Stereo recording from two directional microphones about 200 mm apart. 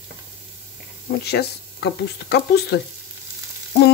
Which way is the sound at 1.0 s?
55° left (ahead or behind).